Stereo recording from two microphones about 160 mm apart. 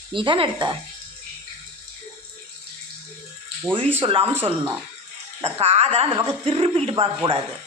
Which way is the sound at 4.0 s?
35° right (ahead or behind).